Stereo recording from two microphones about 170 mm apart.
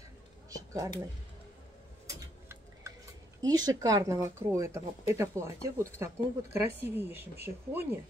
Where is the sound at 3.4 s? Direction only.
20° right (ahead or behind).